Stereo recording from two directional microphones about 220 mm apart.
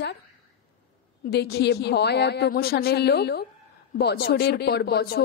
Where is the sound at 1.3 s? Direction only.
45° left (ahead or behind).